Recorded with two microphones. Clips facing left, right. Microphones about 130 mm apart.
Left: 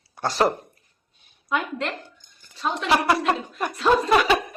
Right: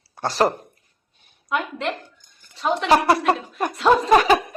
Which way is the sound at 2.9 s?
40° right (ahead or behind).